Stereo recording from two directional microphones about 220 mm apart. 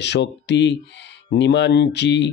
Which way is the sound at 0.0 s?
50° left (ahead or behind).